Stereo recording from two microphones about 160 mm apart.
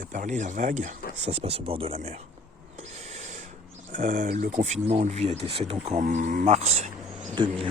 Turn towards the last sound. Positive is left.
turn(degrees=-30)  # may be behind; listen again after turning